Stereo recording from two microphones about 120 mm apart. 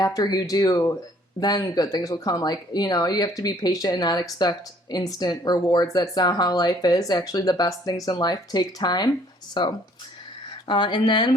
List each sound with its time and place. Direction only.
0.0 s speech: 30° left (ahead or behind)